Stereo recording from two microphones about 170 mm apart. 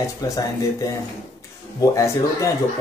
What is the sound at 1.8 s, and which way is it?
Speech, 20° left (ahead or behind).